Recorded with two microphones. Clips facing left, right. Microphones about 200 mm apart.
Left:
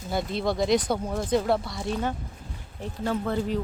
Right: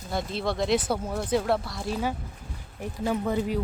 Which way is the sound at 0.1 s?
Centre (ahead or behind).